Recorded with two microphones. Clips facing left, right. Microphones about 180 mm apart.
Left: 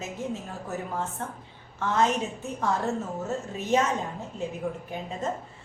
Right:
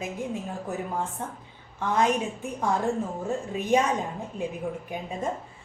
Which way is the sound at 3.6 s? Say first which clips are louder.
Right 2 dB; 15° right (ahead or behind).